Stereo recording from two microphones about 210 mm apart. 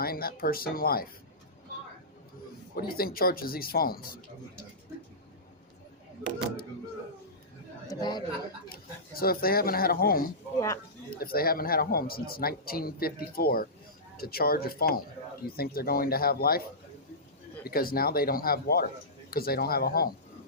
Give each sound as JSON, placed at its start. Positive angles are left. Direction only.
{"t": 0.0, "sound": "speech", "side_deg": 45}
{"t": 2.7, "sound": "speech", "side_deg": 45}
{"t": 7.9, "sound": "a man's voice", "side_deg": 20}
{"t": 8.7, "sound": "speech", "side_deg": 45}